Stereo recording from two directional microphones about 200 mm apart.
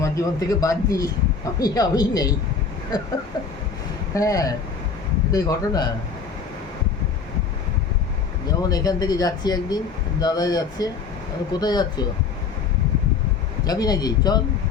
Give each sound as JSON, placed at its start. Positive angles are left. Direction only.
{"t": 0.0, "sound": "speech", "side_deg": 15}
{"t": 4.1, "sound": "speech", "side_deg": 15}
{"t": 8.4, "sound": "speech", "side_deg": 20}
{"t": 13.7, "sound": "speech", "side_deg": 20}